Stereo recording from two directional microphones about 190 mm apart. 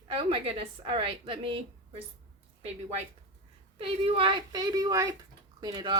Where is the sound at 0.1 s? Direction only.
30° right (ahead or behind).